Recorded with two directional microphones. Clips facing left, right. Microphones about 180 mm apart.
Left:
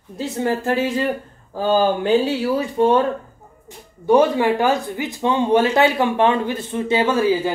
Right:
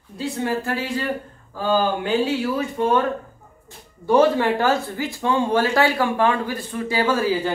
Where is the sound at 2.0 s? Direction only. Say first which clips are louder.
Left 3 dB; 35° left (ahead or behind).